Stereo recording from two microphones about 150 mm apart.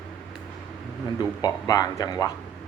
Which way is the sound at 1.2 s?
25° left (ahead or behind).